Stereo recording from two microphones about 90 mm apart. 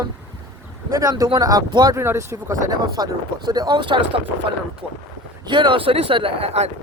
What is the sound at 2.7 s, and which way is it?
Speech, 50° right (ahead or behind).